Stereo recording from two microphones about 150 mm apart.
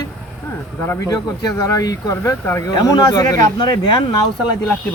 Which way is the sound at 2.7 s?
25° left (ahead or behind).